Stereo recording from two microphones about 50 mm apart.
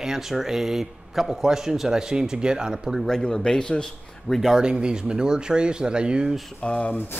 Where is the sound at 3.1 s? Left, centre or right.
Centre.